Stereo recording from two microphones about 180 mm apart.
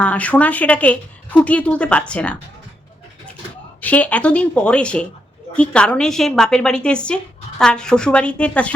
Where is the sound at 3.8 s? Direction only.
10° left (ahead or behind).